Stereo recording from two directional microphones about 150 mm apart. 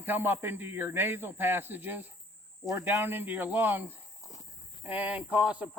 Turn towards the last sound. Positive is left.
turn(degrees=-10)  # may be behind; listen again after turning